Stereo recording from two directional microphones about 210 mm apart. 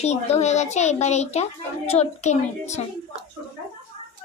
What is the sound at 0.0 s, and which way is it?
A child's voice, 30° left (ahead or behind).